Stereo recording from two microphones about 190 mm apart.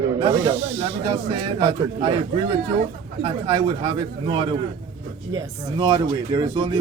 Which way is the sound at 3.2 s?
30° right (ahead or behind).